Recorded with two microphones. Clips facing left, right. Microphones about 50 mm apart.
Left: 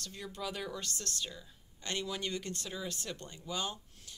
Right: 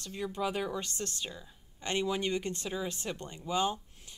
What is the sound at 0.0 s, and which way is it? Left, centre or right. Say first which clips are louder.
Speech: right 7 dB; right.